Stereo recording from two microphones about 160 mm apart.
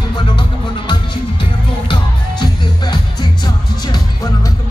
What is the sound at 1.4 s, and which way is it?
Music, 30° left (ahead or behind).